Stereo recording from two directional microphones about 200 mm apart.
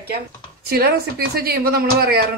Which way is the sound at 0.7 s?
50° right (ahead or behind).